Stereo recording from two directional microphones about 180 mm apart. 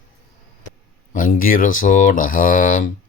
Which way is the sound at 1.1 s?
50° left (ahead or behind).